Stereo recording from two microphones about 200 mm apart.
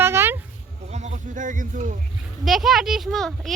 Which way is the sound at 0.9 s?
35° right (ahead or behind).